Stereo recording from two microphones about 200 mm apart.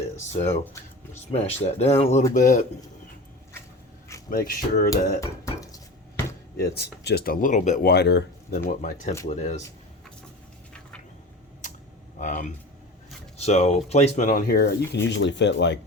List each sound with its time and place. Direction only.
0.6 s a sound: 10° left (ahead or behind)
1.3 s speech: 30° left (ahead or behind)
4.3 s speech: 45° left (ahead or behind)
5.2 s dishes: 15° left (ahead or behind)
6.6 s speech: 55° left (ahead or behind); by 9.6 s 35° left (ahead or behind)
12.2 s speech: 40° left (ahead or behind)
15.0 s speech: 65° left (ahead or behind)